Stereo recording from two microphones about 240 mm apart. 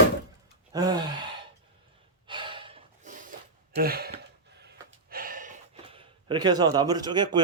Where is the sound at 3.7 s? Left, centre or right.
Right.